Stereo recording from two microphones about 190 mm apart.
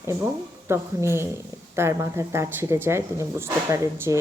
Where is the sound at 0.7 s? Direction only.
15° right (ahead or behind).